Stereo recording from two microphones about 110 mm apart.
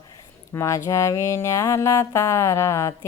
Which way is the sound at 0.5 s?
25° left (ahead or behind).